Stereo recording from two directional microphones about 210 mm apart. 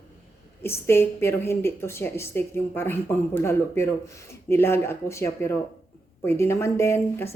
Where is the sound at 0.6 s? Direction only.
10° left (ahead or behind).